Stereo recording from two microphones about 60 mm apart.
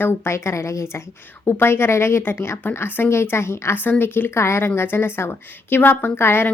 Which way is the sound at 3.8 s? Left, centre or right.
Left.